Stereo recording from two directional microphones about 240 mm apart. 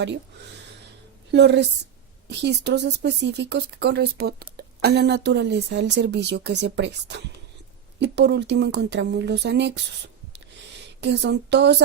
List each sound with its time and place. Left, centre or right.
1.3 s a woman's voice: right
10.8 s speech: right